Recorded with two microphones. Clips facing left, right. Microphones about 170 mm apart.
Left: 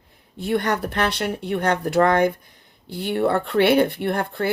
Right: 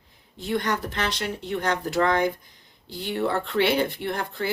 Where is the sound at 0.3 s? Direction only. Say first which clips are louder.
Left 4 dB; 60° left (ahead or behind).